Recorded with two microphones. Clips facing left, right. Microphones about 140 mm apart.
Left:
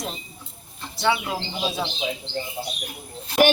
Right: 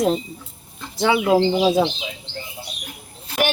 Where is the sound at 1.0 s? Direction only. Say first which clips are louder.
Right 8 dB; 90° right.